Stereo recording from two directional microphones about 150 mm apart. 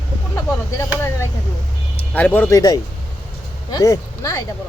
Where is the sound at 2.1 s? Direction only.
10° left (ahead or behind).